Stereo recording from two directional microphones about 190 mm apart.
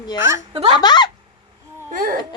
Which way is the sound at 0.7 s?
20° left (ahead or behind).